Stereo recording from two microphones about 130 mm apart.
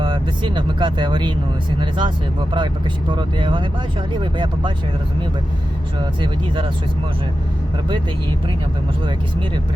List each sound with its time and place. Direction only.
0.0 s speech: 40° right (ahead or behind)